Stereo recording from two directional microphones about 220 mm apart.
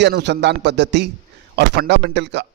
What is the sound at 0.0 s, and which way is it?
A man's voice, 50° right (ahead or behind).